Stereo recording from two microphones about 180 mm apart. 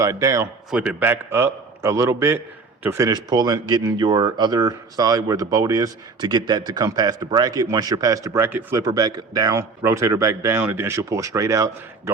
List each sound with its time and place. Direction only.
0.0 s a man's voice: 15° right (ahead or behind)